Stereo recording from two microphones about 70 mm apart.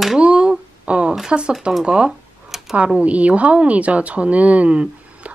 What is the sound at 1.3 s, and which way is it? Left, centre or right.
A woman's voice, centre.